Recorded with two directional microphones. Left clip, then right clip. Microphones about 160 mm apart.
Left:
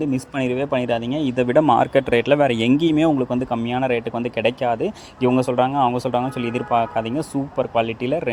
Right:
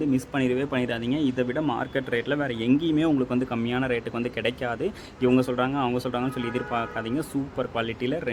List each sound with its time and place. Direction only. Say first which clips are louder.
0.1 s speech: left 2 dB; 25° left (ahead or behind)
1.7 s speech: left 11 dB; 40° left (ahead or behind)
3.2 s speech: left 5 dB; 20° left (ahead or behind)